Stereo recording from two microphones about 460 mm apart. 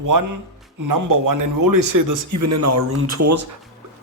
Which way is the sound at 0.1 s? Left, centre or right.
Right.